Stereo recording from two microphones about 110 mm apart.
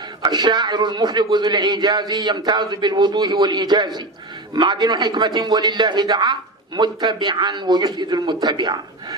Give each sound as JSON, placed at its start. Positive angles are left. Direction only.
{"t": 0.2, "sound": "a man's voice", "side_deg": -40}